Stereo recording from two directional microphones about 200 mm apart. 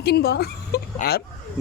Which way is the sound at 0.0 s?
55° left (ahead or behind).